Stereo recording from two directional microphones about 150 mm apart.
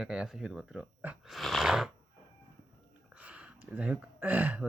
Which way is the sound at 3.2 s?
10° right (ahead or behind).